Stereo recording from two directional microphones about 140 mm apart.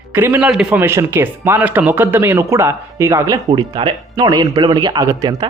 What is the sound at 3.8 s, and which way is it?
Speech, 40° right (ahead or behind).